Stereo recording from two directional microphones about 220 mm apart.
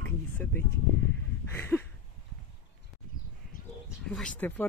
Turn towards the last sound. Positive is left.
turn(degrees=5)  # may be behind; listen again after turning